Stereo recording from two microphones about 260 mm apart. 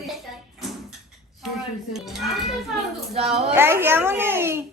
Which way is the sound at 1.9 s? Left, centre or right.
Centre.